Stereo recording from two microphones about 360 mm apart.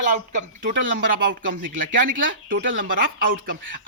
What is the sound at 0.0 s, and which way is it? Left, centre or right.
Speech, right.